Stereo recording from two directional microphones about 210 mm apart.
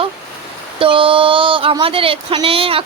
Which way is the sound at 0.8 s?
25° right (ahead or behind).